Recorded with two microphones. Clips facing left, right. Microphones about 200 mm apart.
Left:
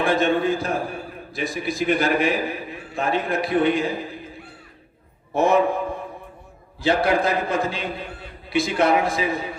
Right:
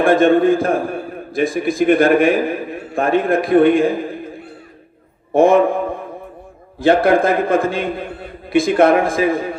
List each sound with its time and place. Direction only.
0.0 s a man's voice: 50° right (ahead or behind)
5.3 s a man's voice: 50° right (ahead or behind)
6.7 s a man's voice: 50° right (ahead or behind)